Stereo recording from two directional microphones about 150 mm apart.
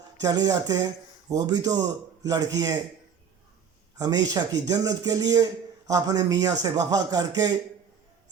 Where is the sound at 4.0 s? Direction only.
25° right (ahead or behind).